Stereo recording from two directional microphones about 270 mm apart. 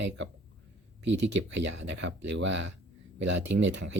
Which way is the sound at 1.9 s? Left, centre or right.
Right.